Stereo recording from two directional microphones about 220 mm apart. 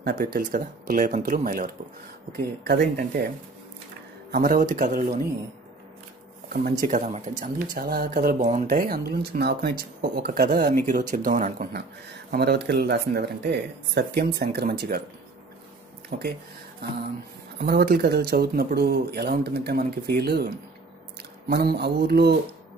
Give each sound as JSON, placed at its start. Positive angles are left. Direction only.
{"t": 0.0, "sound": "speech", "side_deg": -45}
{"t": 4.3, "sound": "speech", "side_deg": -40}
{"t": 6.8, "sound": "speech", "side_deg": -35}
{"t": 16.1, "sound": "speech", "side_deg": -45}
{"t": 17.6, "sound": "speech", "side_deg": -45}